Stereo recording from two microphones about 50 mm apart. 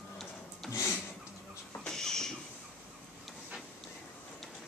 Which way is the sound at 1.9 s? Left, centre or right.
Centre.